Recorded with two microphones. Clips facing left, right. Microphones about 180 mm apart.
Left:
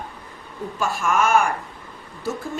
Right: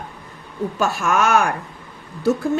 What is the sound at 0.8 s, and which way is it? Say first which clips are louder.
Speech: right 2 dB; 75° right (ahead or behind).